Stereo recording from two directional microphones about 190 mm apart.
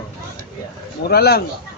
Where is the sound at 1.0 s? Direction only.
55° left (ahead or behind).